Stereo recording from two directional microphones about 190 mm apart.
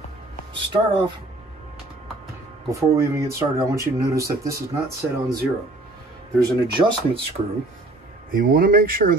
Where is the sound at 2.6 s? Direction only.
15° right (ahead or behind).